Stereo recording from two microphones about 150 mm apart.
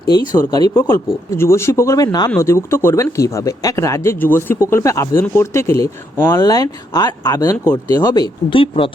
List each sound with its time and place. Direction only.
0.1 s speech: 30° left (ahead or behind)
0.7 s speech: 15° left (ahead or behind); by 8.9 s 35° left (ahead or behind)